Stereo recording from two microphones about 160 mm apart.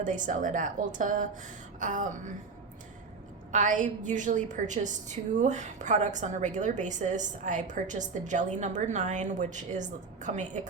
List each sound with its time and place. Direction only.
0.0 s a woman's voice: 55° right (ahead or behind)
3.5 s a woman's voice: 50° right (ahead or behind)